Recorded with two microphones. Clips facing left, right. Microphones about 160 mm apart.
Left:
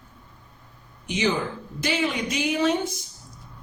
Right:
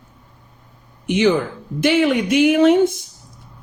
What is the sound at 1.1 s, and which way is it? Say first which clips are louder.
A woman's voice: right 8 dB; 60° right (ahead or behind).